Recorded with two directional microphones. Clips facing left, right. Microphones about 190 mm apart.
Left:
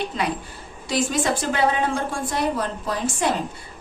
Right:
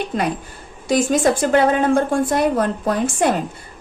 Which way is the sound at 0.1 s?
55° right (ahead or behind).